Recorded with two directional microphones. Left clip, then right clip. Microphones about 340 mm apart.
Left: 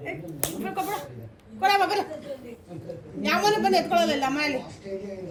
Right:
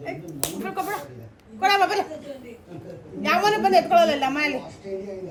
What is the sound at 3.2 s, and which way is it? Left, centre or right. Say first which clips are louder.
A woman's voice: right 2 dB; centre.